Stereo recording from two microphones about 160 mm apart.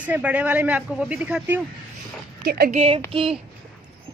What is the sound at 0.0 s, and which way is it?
A woman's voice, 10° right (ahead or behind).